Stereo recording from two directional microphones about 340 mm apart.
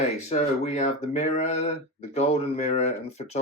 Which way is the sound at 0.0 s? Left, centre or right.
Centre.